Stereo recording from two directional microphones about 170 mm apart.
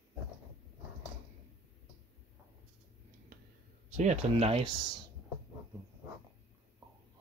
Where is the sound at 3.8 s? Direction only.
45° right (ahead or behind).